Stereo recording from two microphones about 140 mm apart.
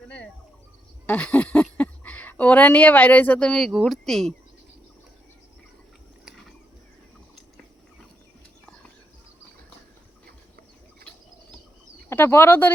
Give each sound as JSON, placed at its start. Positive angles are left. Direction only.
{"t": 1.0, "sound": "a sound", "side_deg": 10}
{"t": 1.8, "sound": "a woman's voice", "side_deg": 10}
{"t": 12.0, "sound": "speech", "side_deg": 15}